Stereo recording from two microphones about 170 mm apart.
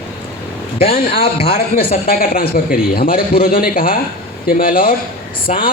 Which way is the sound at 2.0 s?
55° left (ahead or behind).